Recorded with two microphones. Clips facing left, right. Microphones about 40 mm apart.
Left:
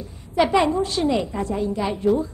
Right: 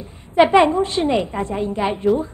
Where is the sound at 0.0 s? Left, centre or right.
Right.